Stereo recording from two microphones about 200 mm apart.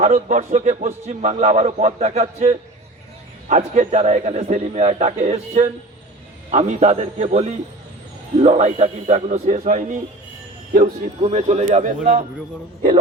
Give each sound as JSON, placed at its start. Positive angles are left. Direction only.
{"t": 0.0, "sound": "a man's voice", "side_deg": -35}